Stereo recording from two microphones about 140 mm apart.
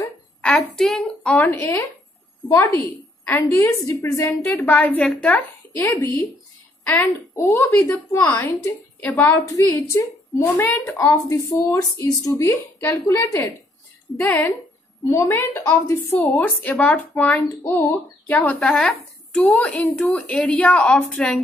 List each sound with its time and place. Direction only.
0.4 s speech: 5° left (ahead or behind)
3.3 s a woman's voice: 20° left (ahead or behind)
4.5 s speech: 10° left (ahead or behind)
5.8 s a woman's voice: 20° left (ahead or behind)
8.1 s speech: 20° left (ahead or behind); by 19.5 s centre (ahead or behind)
19.5 s speech: 10° left (ahead or behind)